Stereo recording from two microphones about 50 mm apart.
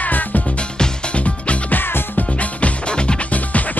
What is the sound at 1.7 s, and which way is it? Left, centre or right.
Music, left.